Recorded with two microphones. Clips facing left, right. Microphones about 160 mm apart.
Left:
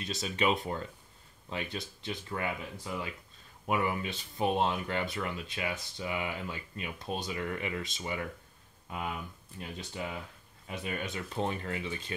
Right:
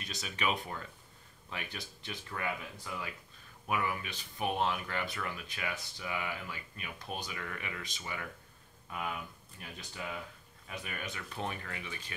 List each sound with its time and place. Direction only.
0.0 s speech: 25° left (ahead or behind)
9.6 s speech: 25° left (ahead or behind)